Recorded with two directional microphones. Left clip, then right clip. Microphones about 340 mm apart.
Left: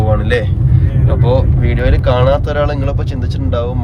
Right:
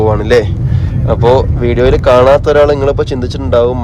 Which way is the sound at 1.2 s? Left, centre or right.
Centre.